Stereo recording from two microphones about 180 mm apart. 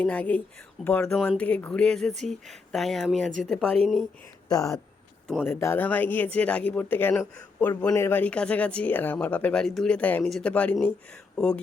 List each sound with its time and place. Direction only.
0.0 s speech: 10° left (ahead or behind)
4.4 s speech: 20° left (ahead or behind)